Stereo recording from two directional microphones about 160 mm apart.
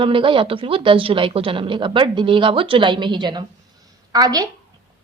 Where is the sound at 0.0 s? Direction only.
30° right (ahead or behind).